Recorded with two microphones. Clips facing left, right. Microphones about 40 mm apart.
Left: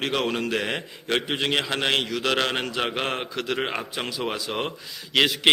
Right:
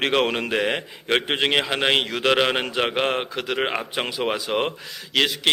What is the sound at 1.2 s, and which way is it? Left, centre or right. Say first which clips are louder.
Speech: right 3 dB; right.